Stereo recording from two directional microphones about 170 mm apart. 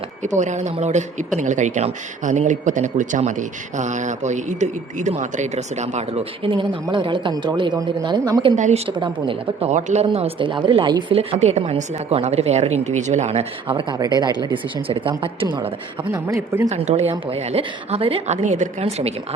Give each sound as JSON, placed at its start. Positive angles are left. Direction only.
{"t": 0.2, "sound": "speech", "side_deg": -45}
{"t": 8.5, "sound": "speech", "side_deg": -45}
{"t": 8.9, "sound": "speech", "side_deg": -30}
{"t": 16.1, "sound": "speech", "side_deg": -15}
{"t": 16.6, "sound": "speech", "side_deg": -40}